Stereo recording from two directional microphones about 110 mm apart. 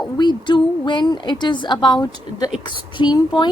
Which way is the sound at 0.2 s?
45° left (ahead or behind).